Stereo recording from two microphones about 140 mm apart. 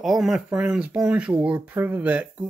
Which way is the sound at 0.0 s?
5° right (ahead or behind).